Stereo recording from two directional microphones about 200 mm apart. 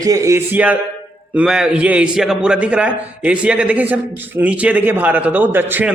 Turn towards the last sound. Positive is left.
turn(degrees=-10)  # may be behind; listen again after turning